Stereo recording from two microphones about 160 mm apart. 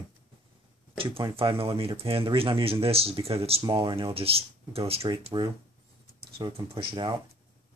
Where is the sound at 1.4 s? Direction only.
35° right (ahead or behind).